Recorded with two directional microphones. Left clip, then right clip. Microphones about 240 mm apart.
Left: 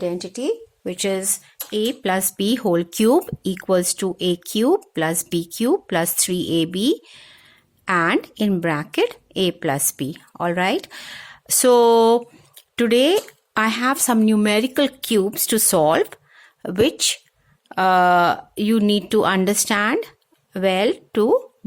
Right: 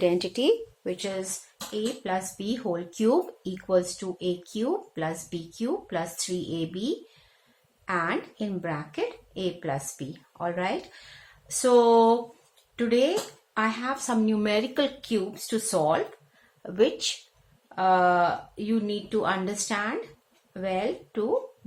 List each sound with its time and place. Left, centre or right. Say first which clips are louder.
0.0 s speech: right 1 dB; left
0.9 s speech: left 8 dB; left